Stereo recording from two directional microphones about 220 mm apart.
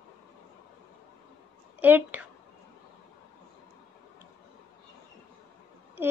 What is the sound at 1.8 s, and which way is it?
Female singing, 10° right (ahead or behind).